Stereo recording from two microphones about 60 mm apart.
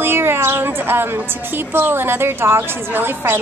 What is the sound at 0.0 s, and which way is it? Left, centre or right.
A woman's voice, right.